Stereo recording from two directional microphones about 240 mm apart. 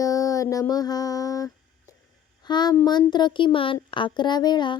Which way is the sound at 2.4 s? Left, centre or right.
Centre.